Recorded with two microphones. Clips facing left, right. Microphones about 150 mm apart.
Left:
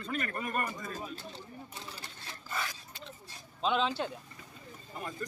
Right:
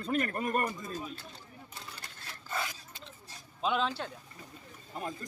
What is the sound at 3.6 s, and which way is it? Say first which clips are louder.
Speech: left 1 dB; 5° right (ahead or behind).